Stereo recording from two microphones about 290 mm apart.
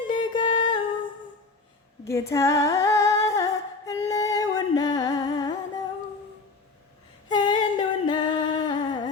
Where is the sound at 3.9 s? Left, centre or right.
Centre.